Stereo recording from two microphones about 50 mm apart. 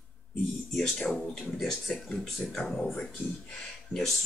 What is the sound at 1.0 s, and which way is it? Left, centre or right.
Speech, left.